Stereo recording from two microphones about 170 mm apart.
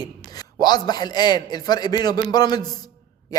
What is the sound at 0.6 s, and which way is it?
A man's voice, 25° left (ahead or behind).